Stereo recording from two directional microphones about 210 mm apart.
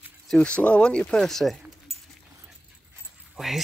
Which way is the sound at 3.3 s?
Centre (ahead or behind).